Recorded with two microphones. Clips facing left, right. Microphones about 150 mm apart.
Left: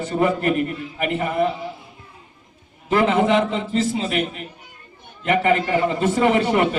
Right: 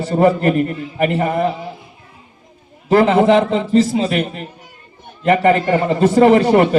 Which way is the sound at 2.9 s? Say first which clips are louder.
Right 6 dB; 35° right (ahead or behind).